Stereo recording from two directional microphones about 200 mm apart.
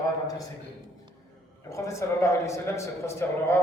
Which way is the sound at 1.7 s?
15° left (ahead or behind).